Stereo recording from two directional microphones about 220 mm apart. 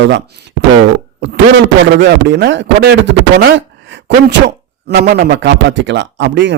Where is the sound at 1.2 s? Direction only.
55° right (ahead or behind).